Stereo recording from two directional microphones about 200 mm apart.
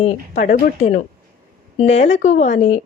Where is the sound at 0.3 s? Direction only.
40° left (ahead or behind).